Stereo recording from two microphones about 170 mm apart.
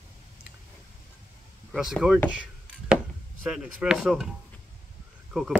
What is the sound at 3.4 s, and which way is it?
Speech, 5° right (ahead or behind).